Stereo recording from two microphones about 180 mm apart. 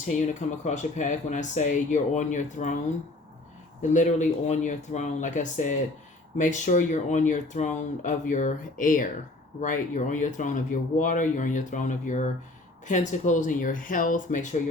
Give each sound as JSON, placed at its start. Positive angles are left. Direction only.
{"t": 0.0, "sound": "speech", "side_deg": 40}
{"t": 3.9, "sound": "speech", "side_deg": 45}